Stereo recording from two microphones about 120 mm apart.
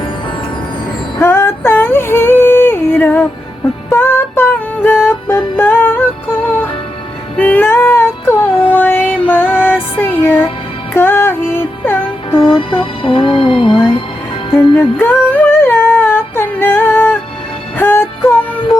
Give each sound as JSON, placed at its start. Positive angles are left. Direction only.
{"t": 1.2, "sound": "yodeling", "side_deg": 20}
{"t": 3.8, "sound": "music", "side_deg": 20}
{"t": 7.3, "sound": "music", "side_deg": 15}
{"t": 12.4, "sound": "music", "side_deg": 45}
{"t": 14.8, "sound": "humming", "side_deg": 15}
{"t": 17.7, "sound": "music", "side_deg": 20}